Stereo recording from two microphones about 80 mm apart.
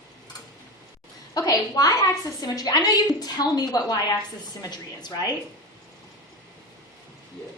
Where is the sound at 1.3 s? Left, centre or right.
Left.